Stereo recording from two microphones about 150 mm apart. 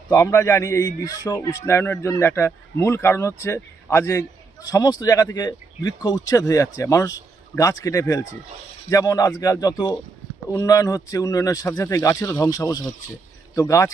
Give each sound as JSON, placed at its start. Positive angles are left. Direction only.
{"t": 0.1, "sound": "speech", "side_deg": 20}